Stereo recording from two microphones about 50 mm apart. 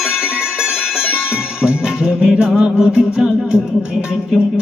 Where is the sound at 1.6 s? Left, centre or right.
Centre.